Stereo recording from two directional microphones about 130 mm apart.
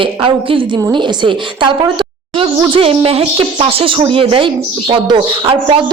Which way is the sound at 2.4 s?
45° right (ahead or behind).